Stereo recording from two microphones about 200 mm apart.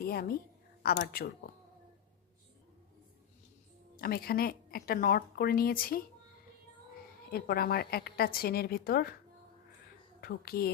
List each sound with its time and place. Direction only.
0.0 s a woman's voice: 50° left (ahead or behind)
4.0 s speech: 50° left (ahead or behind)
7.3 s speech: 50° left (ahead or behind)
10.2 s speech: 50° left (ahead or behind)